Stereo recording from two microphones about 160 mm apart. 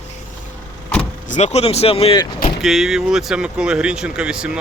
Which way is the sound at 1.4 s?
40° left (ahead or behind).